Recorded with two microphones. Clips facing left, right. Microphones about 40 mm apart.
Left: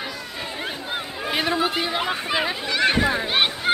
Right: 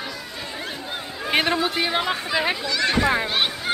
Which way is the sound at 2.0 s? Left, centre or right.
Left.